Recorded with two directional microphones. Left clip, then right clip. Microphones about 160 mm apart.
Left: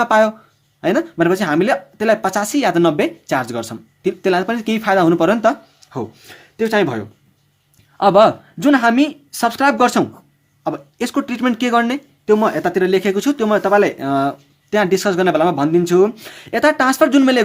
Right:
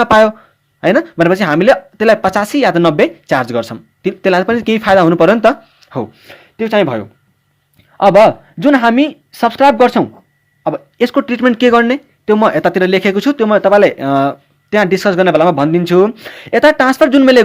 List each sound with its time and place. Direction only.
0.0 s speech: 35° right (ahead or behind)
7.9 s speech: 20° right (ahead or behind)
10.6 s speech: 25° right (ahead or behind)